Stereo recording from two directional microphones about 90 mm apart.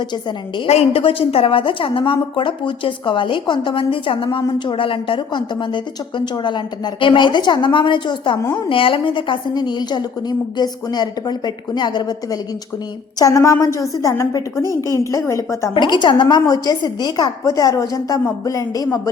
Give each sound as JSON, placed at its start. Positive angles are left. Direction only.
{"t": 0.1, "sound": "a woman's voice", "side_deg": 60}
{"t": 4.4, "sound": "a woman's voice", "side_deg": 65}
{"t": 8.7, "sound": "a woman's voice", "side_deg": 75}
{"t": 13.1, "sound": "a woman's voice", "side_deg": 40}
{"t": 15.7, "sound": "a woman's voice", "side_deg": 55}